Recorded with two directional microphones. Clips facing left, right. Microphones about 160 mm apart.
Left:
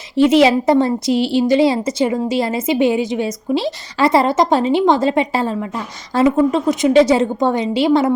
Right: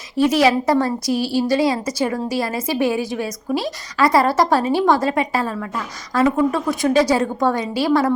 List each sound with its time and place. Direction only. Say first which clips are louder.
0.2 s speech: left 4 dB; 25° left (ahead or behind)